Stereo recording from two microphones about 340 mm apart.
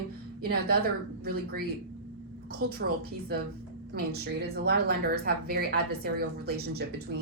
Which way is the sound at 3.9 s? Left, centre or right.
Right.